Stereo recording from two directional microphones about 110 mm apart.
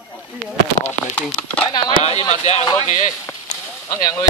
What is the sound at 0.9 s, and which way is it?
Speech, 10° left (ahead or behind).